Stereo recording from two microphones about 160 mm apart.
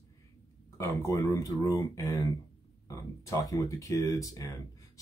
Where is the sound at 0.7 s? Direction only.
20° left (ahead or behind).